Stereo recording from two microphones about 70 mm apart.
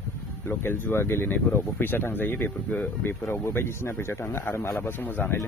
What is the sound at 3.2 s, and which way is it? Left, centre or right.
Speech, left.